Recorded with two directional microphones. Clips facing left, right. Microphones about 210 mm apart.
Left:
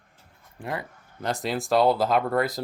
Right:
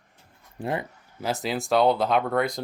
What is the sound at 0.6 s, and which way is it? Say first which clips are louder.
Speech: right 4 dB; 25° right (ahead or behind).